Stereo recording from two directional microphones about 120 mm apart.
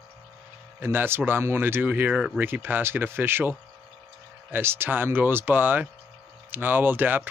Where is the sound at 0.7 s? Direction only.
15° right (ahead or behind).